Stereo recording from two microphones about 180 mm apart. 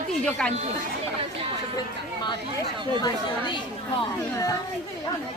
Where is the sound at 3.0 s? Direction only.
25° left (ahead or behind).